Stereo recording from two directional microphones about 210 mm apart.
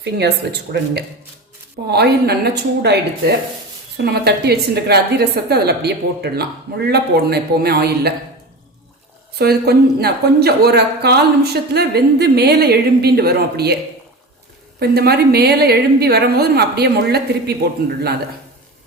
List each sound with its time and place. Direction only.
0.0 s speech: 50° right (ahead or behind)
9.4 s speech: 50° right (ahead or behind)
14.8 s speech: 50° right (ahead or behind)